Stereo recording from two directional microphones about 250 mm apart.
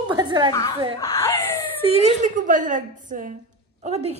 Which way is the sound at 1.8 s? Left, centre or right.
Right.